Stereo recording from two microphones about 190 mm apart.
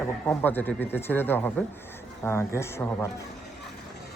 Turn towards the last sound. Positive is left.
turn(degrees=15)  # may be behind; listen again after turning